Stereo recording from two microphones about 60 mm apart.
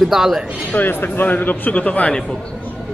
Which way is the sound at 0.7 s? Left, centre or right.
Left.